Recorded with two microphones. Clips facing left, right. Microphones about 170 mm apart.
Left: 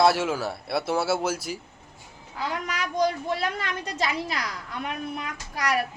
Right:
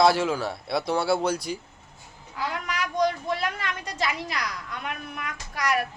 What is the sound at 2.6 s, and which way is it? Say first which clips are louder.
A woman's voice: even; 30° left (ahead or behind).